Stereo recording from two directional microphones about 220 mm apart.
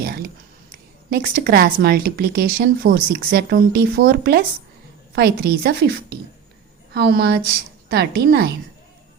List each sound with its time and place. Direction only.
0.0 s speech: 45° right (ahead or behind)
6.9 s speech: 45° right (ahead or behind)